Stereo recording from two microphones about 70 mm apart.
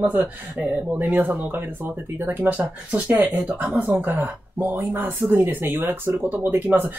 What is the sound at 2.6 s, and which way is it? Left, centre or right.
Speech, centre.